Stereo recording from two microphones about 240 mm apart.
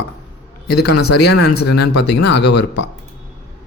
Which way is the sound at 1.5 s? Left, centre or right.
Left.